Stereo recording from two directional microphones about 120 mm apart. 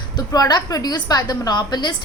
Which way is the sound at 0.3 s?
30° left (ahead or behind).